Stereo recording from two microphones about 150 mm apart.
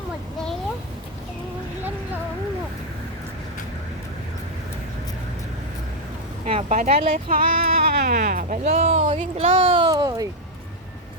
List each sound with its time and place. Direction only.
6.4 s speech: 50° right (ahead or behind)
9.9 s speech: 25° right (ahead or behind)